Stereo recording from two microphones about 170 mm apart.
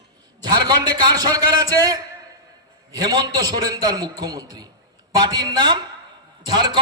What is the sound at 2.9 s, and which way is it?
A man's voice, 25° right (ahead or behind).